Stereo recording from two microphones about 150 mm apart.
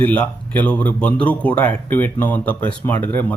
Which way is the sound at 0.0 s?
10° left (ahead or behind).